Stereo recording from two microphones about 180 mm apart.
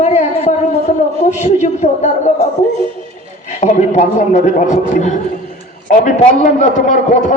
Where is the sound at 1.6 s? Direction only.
40° left (ahead or behind).